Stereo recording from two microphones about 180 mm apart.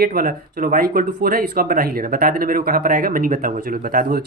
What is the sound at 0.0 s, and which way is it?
Speech, 55° right (ahead or behind).